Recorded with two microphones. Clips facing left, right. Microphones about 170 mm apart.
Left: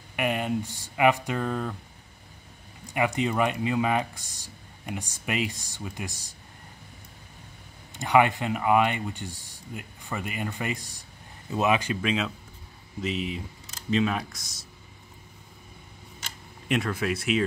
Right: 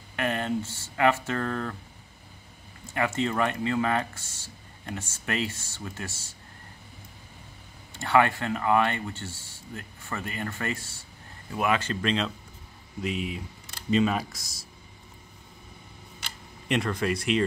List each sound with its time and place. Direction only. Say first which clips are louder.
0.1 s speech: left 1 dB; 15° left (ahead or behind)
2.9 s speech: left 1 dB; 15° left (ahead or behind)
7.9 s speech: left 1 dB; 15° left (ahead or behind); by 14.7 s centre (ahead or behind)
16.6 s speech: even; centre (ahead or behind)